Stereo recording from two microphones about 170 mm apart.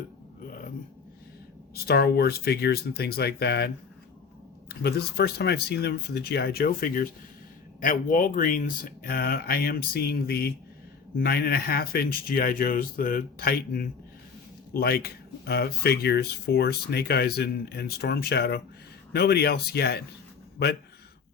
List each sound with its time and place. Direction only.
1.7 s speech: 65° left (ahead or behind)
4.7 s speech: 70° left (ahead or behind)